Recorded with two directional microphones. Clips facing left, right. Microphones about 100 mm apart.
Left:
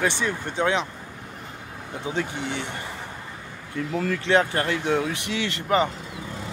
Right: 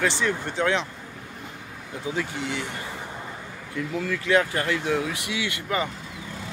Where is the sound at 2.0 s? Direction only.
25° left (ahead or behind).